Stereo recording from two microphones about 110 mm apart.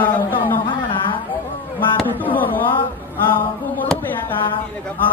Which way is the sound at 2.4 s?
15° left (ahead or behind).